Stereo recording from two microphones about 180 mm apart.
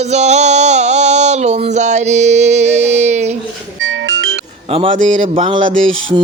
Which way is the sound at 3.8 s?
90° right.